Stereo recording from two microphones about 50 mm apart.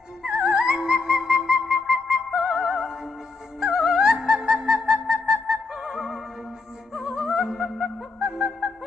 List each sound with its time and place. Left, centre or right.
0.2 s music: centre